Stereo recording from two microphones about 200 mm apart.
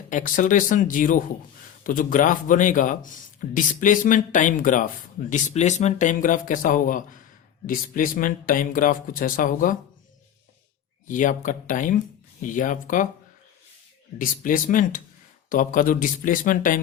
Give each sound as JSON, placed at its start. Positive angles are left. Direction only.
{"t": 0.1, "sound": "speech", "side_deg": 40}
{"t": 11.1, "sound": "speech", "side_deg": 40}
{"t": 14.2, "sound": "speech", "side_deg": 45}